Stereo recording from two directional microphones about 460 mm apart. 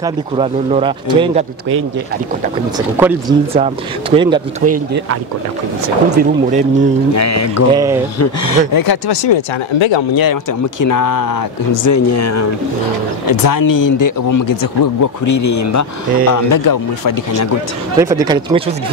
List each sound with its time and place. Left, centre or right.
0.0 s speech: centre
3.0 s speech: centre
6.1 s speech: centre
7.2 s speech: left
7.7 s speech: centre
8.2 s speech: left
10.8 s speech: left
13.3 s speech: left
17.9 s speech: centre